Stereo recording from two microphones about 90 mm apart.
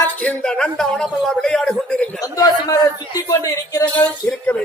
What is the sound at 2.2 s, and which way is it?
Speech, 40° left (ahead or behind).